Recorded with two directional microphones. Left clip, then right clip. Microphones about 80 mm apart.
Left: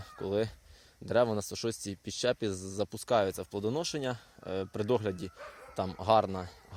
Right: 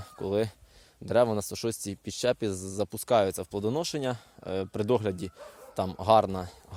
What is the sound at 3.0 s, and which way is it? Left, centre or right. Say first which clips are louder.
Speech: right 4 dB; right.